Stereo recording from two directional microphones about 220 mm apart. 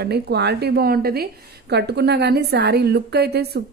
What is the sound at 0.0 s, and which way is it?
A woman's voice, 50° right (ahead or behind).